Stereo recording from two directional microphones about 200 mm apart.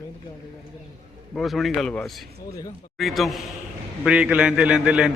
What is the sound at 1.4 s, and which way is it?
A man's voice, centre (ahead or behind).